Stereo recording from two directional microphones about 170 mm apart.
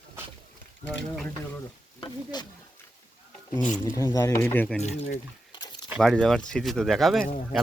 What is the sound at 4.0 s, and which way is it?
Speech, 20° left (ahead or behind).